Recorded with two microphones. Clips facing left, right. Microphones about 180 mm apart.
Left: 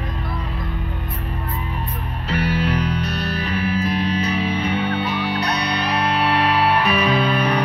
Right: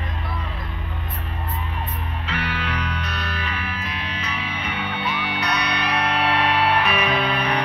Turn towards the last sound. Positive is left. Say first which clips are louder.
# left 4 dB
turn(degrees=35)  # may be behind; listen again after turning